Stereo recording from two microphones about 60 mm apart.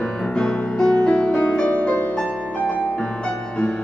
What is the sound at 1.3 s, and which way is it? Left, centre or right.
Music, left.